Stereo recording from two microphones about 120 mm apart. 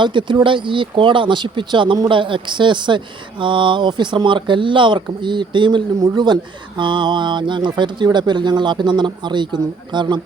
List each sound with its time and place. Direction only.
0.0 s speech: 40° right (ahead or behind)